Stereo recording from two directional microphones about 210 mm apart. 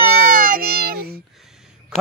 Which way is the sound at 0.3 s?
40° right (ahead or behind).